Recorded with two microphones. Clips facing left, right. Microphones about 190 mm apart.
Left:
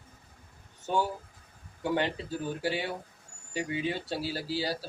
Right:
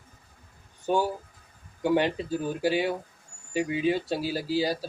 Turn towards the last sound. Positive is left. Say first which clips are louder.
# right 6 dB
turn(degrees=-15)  # may be behind; listen again after turning